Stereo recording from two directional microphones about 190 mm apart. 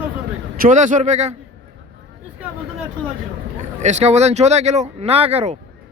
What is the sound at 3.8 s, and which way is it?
Speech, 35° right (ahead or behind).